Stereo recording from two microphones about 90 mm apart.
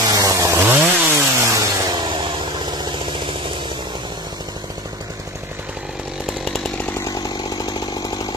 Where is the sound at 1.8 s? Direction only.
55° right (ahead or behind).